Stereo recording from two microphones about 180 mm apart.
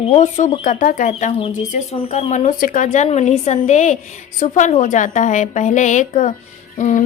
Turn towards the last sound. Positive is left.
turn(degrees=40)  # may be behind; listen again after turning